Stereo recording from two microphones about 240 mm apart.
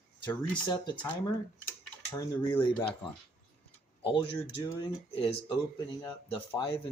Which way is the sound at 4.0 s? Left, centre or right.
Left.